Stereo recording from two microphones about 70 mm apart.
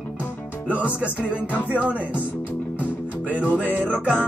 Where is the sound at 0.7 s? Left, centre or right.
Centre.